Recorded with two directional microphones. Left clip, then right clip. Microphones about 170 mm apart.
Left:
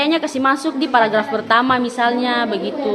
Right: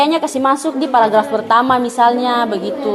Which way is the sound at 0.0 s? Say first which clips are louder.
Right 3 dB; 10° right (ahead or behind).